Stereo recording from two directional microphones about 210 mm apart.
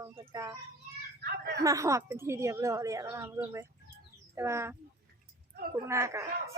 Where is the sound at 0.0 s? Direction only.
15° right (ahead or behind).